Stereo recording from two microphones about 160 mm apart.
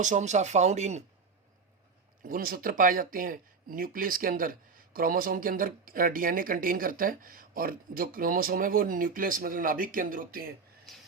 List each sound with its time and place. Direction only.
0.0 s speech: 50° right (ahead or behind)
2.2 s speech: 60° right (ahead or behind)